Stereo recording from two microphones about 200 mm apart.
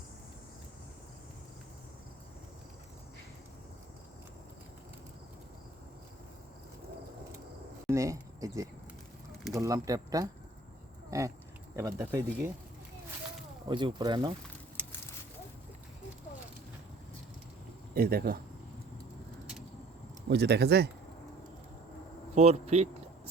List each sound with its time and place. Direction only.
7.9 s a sound: 15° right (ahead or behind)
9.5 s speech: 15° right (ahead or behind)
13.7 s speech: 25° right (ahead or behind)
17.9 s speech: 50° right (ahead or behind)
20.3 s speech: 55° right (ahead or behind)
22.4 s speech: 30° right (ahead or behind)